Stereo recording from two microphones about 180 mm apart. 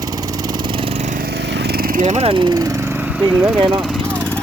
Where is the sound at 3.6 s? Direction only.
25° right (ahead or behind).